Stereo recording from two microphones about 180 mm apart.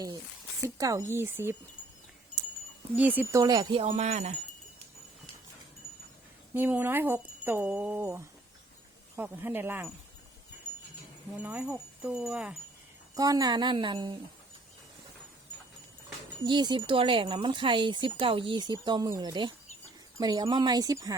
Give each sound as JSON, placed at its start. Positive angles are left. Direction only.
{"t": 0.6, "sound": "speech", "side_deg": -20}
{"t": 2.9, "sound": "speech", "side_deg": -10}
{"t": 6.5, "sound": "speech", "side_deg": -10}
{"t": 11.3, "sound": "speech", "side_deg": -10}
{"t": 13.1, "sound": "speech", "side_deg": -20}
{"t": 16.4, "sound": "speech", "side_deg": -25}